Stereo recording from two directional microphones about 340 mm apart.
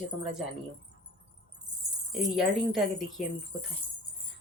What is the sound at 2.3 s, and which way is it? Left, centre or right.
Speech, centre.